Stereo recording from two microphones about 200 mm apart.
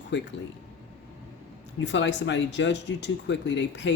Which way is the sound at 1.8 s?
65° left (ahead or behind).